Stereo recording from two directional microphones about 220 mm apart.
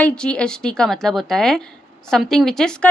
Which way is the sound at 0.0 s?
5° left (ahead or behind).